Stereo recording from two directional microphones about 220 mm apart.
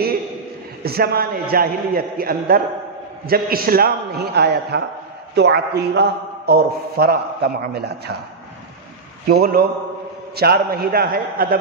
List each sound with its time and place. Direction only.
0.8 s a man's voice: 45° right (ahead or behind)
9.3 s a man's voice: 45° right (ahead or behind)